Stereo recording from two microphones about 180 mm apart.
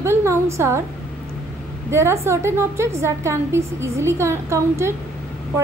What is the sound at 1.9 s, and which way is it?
A woman's voice, 15° right (ahead or behind).